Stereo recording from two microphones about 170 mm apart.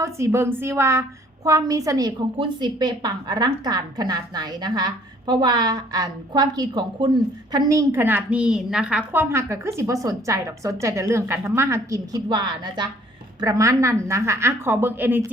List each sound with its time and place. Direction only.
0.0 s a woman's voice: 15° right (ahead or behind)